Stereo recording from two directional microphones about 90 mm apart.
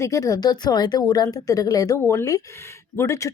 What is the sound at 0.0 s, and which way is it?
A woman's voice, 40° left (ahead or behind).